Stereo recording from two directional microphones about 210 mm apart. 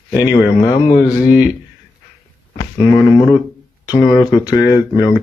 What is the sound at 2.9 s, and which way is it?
Speech, 15° left (ahead or behind).